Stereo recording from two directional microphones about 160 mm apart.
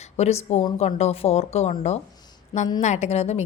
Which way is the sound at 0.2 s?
45° left (ahead or behind).